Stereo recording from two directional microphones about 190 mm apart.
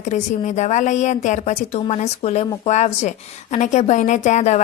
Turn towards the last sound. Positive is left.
turn(degrees=35)  # may be behind; listen again after turning